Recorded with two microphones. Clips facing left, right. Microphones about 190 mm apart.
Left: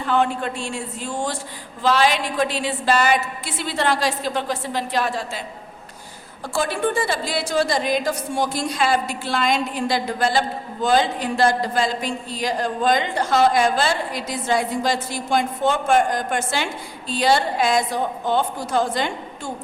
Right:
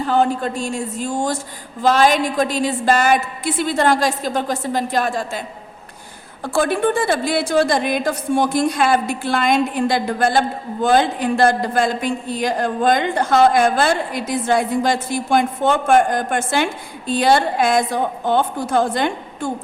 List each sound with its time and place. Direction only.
0.0 s a man's voice: 40° right (ahead or behind)
6.4 s a man's voice: 55° right (ahead or behind)